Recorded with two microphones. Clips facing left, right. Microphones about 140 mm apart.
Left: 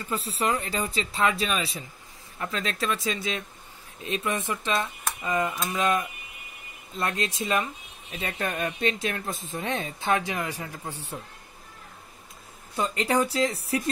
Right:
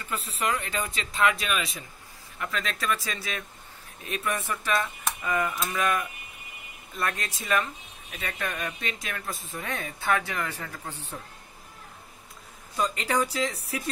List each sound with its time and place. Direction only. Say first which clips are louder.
0.1 s speech: left 2 dB; 30° left (ahead or behind); by 11.1 s 10° left (ahead or behind)
12.7 s speech: left 2 dB; 30° left (ahead or behind)